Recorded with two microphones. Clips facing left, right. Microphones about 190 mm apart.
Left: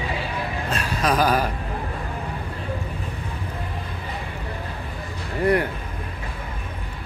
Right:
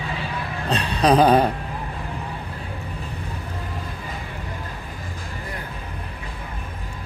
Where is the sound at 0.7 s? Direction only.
30° right (ahead or behind).